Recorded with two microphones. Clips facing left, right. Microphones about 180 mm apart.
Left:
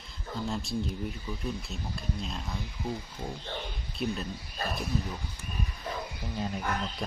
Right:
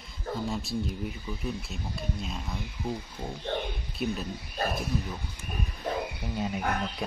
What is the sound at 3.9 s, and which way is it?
Speech, centre (ahead or behind).